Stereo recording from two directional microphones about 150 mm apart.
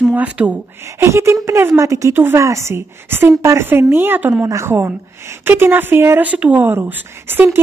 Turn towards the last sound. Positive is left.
turn(degrees=-15)  # may be behind; listen again after turning